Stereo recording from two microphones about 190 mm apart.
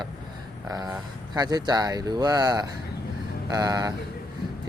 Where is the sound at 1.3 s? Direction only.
20° right (ahead or behind).